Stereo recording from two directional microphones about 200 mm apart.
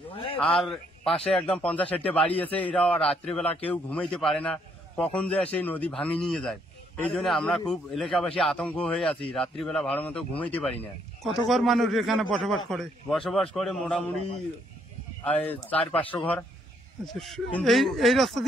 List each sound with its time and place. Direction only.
0.1 s a sound: 25° left (ahead or behind)
0.4 s a man's voice: centre (ahead or behind)
15.2 s a man's voice: 10° left (ahead or behind)